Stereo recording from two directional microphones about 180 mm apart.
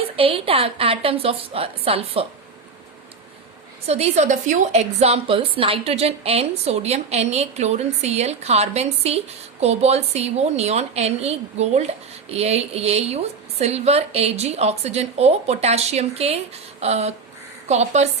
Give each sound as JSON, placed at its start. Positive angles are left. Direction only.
{"t": 0.2, "sound": "a woman's voice", "side_deg": -30}
{"t": 3.8, "sound": "a woman's voice", "side_deg": -35}